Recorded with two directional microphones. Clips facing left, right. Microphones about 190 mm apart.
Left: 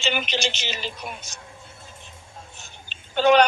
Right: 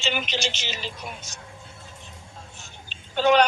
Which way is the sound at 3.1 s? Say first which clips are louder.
Left 2 dB; 65° left (ahead or behind).